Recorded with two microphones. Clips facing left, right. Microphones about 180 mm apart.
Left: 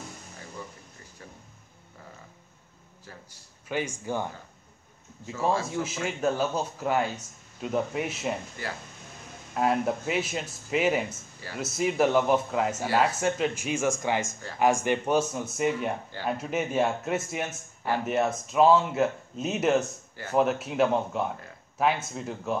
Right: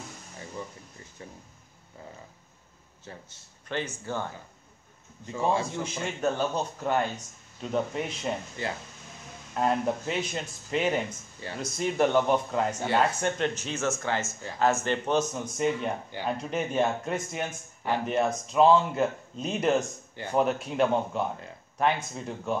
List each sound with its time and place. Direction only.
3.1 s a man's voice: 25° right (ahead or behind)
3.6 s speech: 10° left (ahead or behind)
5.2 s a man's voice: 20° right (ahead or behind)
5.7 s speech: 5° left (ahead or behind)
8.6 s a man's voice: 20° right (ahead or behind)
9.6 s speech: 5° left (ahead or behind)